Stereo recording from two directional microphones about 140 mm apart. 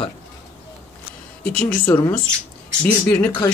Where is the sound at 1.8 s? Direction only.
15° left (ahead or behind).